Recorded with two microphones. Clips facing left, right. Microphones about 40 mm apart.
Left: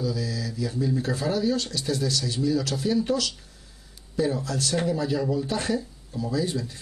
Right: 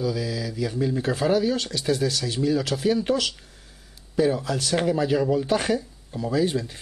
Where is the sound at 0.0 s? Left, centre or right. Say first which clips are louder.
Right 2 dB; centre.